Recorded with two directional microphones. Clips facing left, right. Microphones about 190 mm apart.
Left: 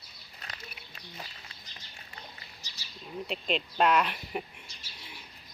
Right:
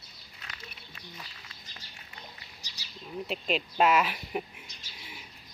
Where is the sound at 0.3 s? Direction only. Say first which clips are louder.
Left 2 dB; 40° left (ahead or behind).